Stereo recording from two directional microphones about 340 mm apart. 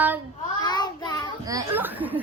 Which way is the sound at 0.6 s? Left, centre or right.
Centre.